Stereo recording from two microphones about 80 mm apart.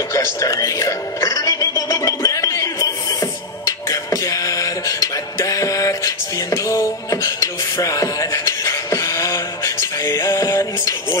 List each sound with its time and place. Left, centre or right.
0.1 s music: left